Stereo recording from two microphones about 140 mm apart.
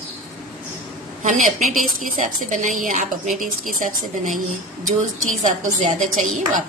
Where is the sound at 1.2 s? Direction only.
60° right (ahead or behind).